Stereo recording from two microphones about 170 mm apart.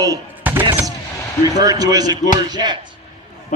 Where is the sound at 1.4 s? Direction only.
20° right (ahead or behind).